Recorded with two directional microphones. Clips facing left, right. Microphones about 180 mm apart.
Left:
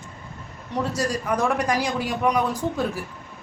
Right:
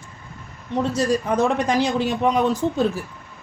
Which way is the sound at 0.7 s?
20° right (ahead or behind).